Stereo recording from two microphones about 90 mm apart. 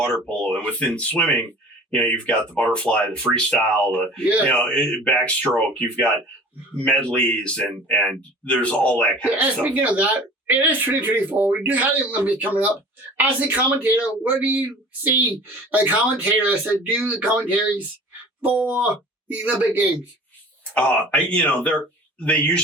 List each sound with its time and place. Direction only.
0.0 s speech: 10° left (ahead or behind)
4.2 s speech: 15° right (ahead or behind)
4.4 s speech: 10° left (ahead or behind)
9.4 s speech: 20° right (ahead or behind)
20.7 s speech: 15° left (ahead or behind)